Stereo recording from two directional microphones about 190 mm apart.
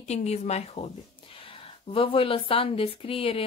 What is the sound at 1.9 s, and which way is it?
Speech, 30° left (ahead or behind).